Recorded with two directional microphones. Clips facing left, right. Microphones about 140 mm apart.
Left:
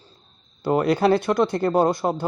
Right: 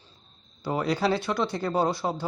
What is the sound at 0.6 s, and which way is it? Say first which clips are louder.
A man's voice: left 7 dB; 55° left (ahead or behind).